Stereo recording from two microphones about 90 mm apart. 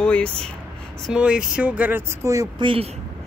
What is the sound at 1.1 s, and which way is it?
Speech, 10° right (ahead or behind).